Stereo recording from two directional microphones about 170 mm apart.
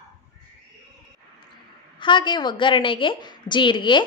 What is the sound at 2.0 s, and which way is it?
A woman's voice, 30° left (ahead or behind).